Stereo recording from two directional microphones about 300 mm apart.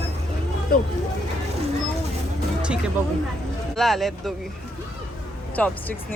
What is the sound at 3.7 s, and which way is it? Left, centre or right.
Speech, centre.